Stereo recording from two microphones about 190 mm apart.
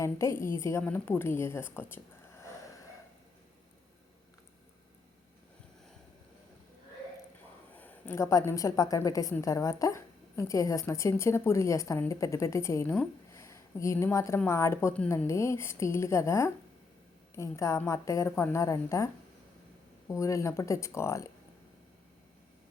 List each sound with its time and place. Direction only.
0.0 s a woman's voice: 15° left (ahead or behind)
7.8 s a woman's voice: 10° left (ahead or behind)